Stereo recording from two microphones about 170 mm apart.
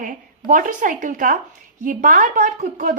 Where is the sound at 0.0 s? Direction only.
50° right (ahead or behind).